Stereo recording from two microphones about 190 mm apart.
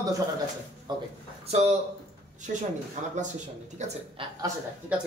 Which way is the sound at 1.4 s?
35° right (ahead or behind).